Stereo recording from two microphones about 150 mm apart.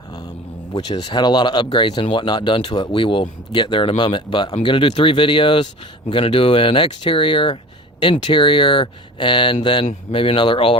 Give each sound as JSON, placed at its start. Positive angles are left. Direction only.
{"t": 0.7, "sound": "speech", "side_deg": 30}